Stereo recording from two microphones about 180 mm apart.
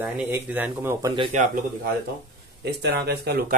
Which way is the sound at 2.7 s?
60° right (ahead or behind).